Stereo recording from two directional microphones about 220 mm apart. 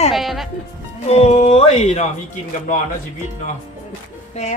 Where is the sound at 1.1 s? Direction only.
30° left (ahead or behind).